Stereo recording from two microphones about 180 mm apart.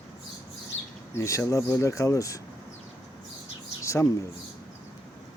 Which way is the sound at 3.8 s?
15° left (ahead or behind).